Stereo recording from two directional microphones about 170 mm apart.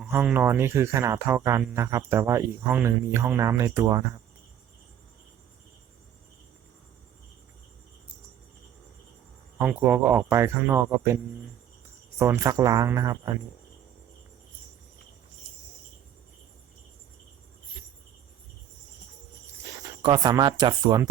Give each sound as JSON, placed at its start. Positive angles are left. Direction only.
{"t": 0.0, "sound": "speech", "side_deg": -10}
{"t": 9.6, "sound": "speech", "side_deg": -10}
{"t": 12.2, "sound": "speech", "side_deg": -15}
{"t": 20.0, "sound": "speech", "side_deg": -25}